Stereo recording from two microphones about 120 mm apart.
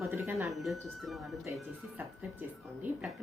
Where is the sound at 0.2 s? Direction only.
15° right (ahead or behind).